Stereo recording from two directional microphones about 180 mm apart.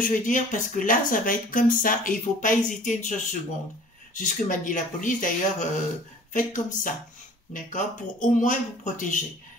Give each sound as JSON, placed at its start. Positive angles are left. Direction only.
{"t": 0.0, "sound": "speech", "side_deg": 45}